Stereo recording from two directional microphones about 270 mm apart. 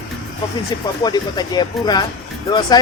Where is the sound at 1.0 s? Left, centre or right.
Centre.